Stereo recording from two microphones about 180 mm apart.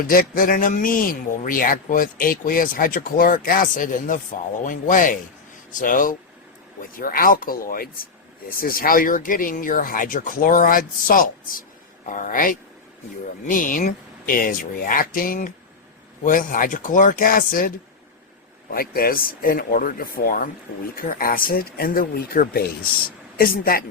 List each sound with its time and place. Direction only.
0.1 s speech: 50° left (ahead or behind)
18.7 s a man's voice: 55° left (ahead or behind)